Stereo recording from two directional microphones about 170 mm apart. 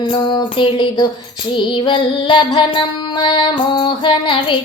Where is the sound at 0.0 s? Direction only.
25° left (ahead or behind).